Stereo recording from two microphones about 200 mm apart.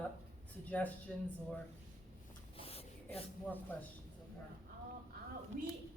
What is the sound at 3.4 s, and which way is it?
Speech, 10° left (ahead or behind).